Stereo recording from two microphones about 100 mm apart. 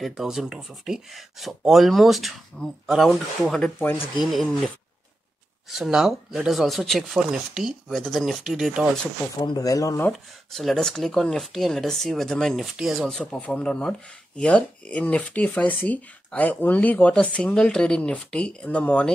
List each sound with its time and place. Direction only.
0.0 s speech: 5° right (ahead or behind)
5.7 s speech: 5° right (ahead or behind)
9.4 s speech: 40° left (ahead or behind)
10.5 s speech: 5° left (ahead or behind)
13.2 s speech: 10° left (ahead or behind)